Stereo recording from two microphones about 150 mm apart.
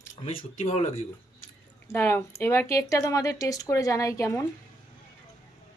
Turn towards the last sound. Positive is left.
turn(degrees=20)  # may be behind; listen again after turning